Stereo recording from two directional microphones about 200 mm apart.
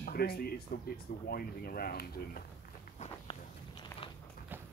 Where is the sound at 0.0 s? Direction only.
50° left (ahead or behind).